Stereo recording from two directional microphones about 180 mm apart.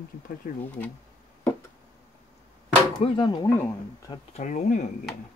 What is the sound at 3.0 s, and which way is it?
Speech, 25° left (ahead or behind).